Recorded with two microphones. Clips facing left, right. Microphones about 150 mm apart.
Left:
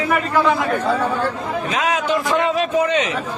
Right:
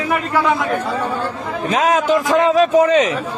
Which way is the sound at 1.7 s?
40° right (ahead or behind).